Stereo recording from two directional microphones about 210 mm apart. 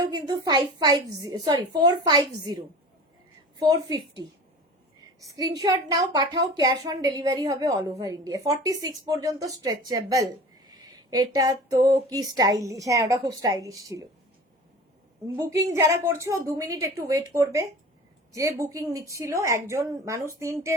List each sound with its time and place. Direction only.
0.1 s a woman's voice: 20° right (ahead or behind)
3.6 s a woman's voice: 15° right (ahead or behind)
5.2 s a woman's voice: 15° right (ahead or behind)
15.7 s a woman's voice: 15° right (ahead or behind)